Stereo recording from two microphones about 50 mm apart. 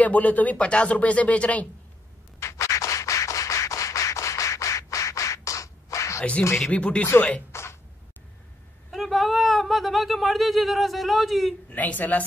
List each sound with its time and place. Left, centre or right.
0.0 s speech: left
2.4 s scratch: left
6.7 s speech: left
8.9 s speech: centre
11.7 s a woman's voice: left